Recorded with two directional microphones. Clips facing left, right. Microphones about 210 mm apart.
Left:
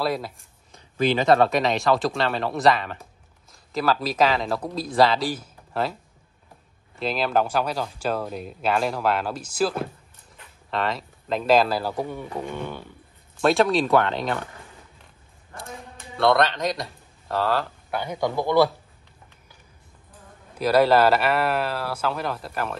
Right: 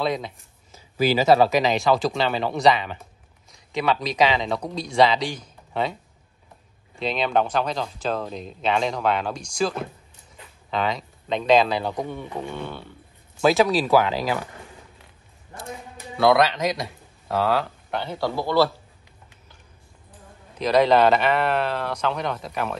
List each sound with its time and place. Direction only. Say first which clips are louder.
0.0 s speech: right 1 dB; 5° left (ahead or behind)
7.0 s a man's voice: even; centre (ahead or behind)
13.4 s speech: right 1 dB; centre (ahead or behind)
16.2 s speech: right 2 dB; centre (ahead or behind)
18.0 s a man's voice: left 2 dB; 15° left (ahead or behind)
20.5 s speech: even; 5° left (ahead or behind)